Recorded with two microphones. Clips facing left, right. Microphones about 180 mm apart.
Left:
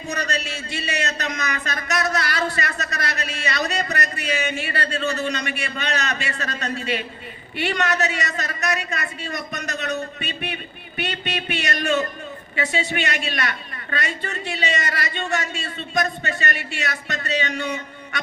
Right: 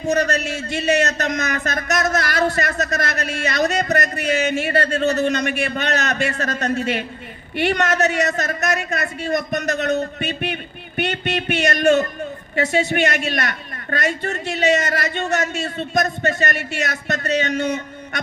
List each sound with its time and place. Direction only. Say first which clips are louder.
0.1 s a man's voice: right 8 dB; 45° right (ahead or behind)